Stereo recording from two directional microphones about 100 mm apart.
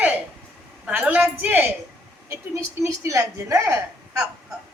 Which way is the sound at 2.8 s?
30° right (ahead or behind).